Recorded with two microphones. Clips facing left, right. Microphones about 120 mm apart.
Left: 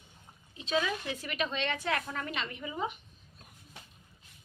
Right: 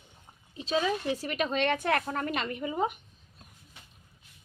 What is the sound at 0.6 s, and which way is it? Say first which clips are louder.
A woman's voice: right 3 dB; 35° right (ahead or behind).